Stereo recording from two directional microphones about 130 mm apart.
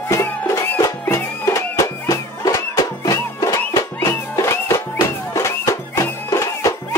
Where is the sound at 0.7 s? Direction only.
20° left (ahead or behind).